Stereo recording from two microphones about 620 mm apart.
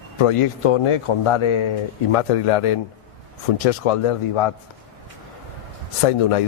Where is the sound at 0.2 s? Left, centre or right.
Left.